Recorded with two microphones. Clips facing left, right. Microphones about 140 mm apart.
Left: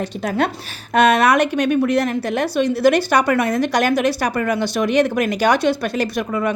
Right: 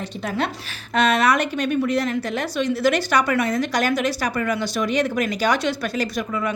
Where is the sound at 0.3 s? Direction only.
50° left (ahead or behind).